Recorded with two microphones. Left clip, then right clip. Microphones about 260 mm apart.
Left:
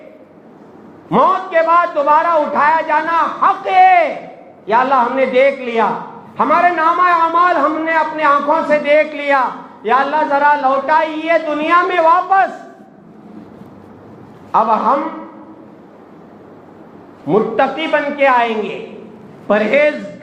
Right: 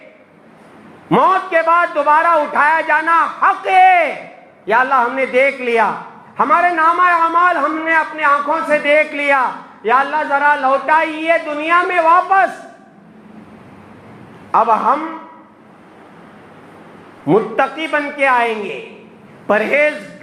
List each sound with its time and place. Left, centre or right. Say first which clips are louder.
1.1 s a man's voice: even; right
14.5 s a man's voice: even; right
17.2 s a man's voice: left 1 dB; right